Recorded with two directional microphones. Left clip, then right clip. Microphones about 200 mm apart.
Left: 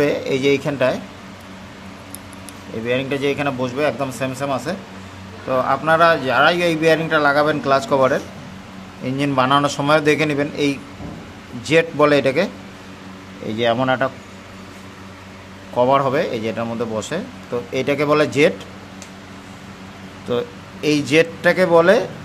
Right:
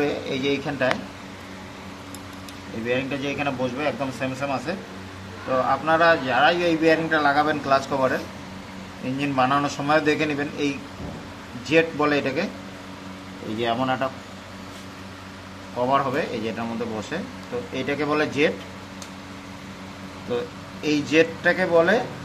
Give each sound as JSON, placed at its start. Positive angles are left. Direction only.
{"t": 0.0, "sound": "a man's voice", "side_deg": 60}
{"t": 2.9, "sound": "a man's voice", "side_deg": 60}
{"t": 9.2, "sound": "a man's voice", "side_deg": 60}
{"t": 13.6, "sound": "speech", "side_deg": 45}
{"t": 15.8, "sound": "a man's voice", "side_deg": 60}
{"t": 20.2, "sound": "a man's voice", "side_deg": 55}